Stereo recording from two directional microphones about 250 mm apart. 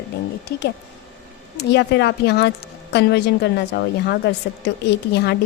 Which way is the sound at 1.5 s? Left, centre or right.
Left.